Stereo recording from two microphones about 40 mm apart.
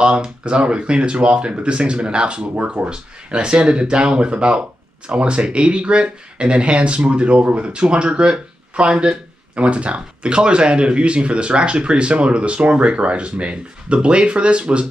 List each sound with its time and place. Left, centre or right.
0.0 s speech: right